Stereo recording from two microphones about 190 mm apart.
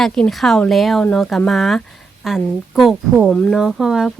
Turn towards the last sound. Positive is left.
turn(degrees=0)  # may be behind; listen again after turning